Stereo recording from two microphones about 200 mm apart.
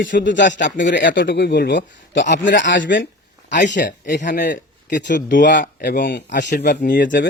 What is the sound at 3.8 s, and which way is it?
Speech, 50° left (ahead or behind).